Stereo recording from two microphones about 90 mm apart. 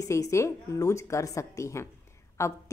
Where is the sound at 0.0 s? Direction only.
35° left (ahead or behind).